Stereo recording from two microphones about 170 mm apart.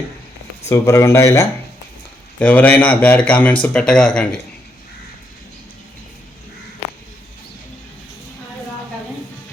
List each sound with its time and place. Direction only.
0.7 s a man's voice: 15° left (ahead or behind)